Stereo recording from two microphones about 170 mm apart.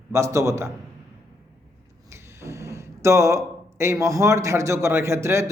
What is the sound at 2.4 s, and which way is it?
Speech, 15° right (ahead or behind).